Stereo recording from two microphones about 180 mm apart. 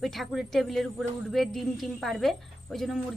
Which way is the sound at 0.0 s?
Centre (ahead or behind).